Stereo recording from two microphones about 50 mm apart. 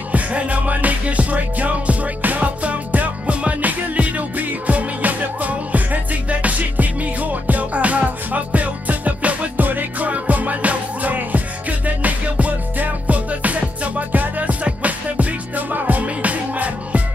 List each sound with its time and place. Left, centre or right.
0.1 s music: right